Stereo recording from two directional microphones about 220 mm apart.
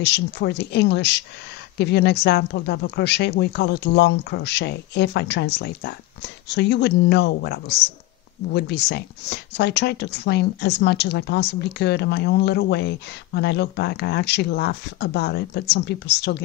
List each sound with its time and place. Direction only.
0.0 s speech: 50° left (ahead or behind)